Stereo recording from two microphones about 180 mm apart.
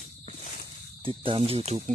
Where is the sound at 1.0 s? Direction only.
30° right (ahead or behind).